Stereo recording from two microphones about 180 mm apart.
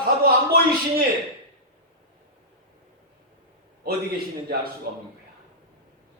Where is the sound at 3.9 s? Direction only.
60° right (ahead or behind).